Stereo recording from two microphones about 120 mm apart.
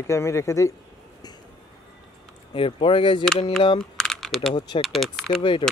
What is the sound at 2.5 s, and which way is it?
Speech, 45° left (ahead or behind).